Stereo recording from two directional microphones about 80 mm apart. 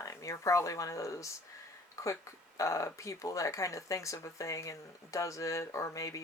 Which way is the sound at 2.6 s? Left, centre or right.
Left.